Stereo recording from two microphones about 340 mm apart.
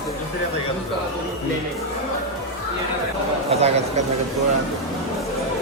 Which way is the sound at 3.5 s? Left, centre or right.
Centre.